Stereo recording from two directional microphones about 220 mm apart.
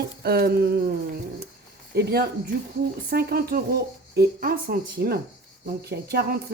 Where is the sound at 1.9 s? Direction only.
45° right (ahead or behind).